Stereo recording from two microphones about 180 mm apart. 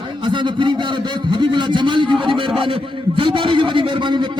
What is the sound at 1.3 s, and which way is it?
A man's voice, 25° right (ahead or behind).